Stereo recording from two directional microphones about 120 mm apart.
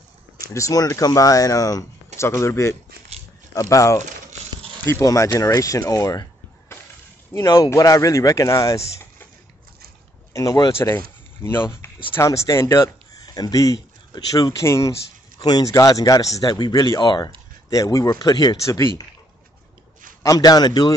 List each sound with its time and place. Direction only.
0.5 s speech: 25° left (ahead or behind)
7.3 s speech: 30° left (ahead or behind)
10.3 s speech: 30° left (ahead or behind)
20.2 s speech: 35° left (ahead or behind)